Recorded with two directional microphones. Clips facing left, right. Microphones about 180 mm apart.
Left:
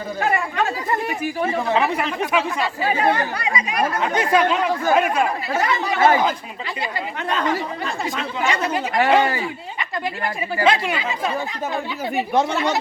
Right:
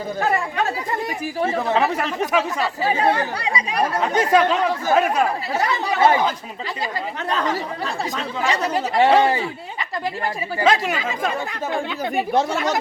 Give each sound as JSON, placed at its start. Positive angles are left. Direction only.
{"t": 1.2, "sound": "speech", "side_deg": -35}
{"t": 7.3, "sound": "speech", "side_deg": -35}
{"t": 10.6, "sound": "speech", "side_deg": -40}
{"t": 12.5, "sound": "speech", "side_deg": -50}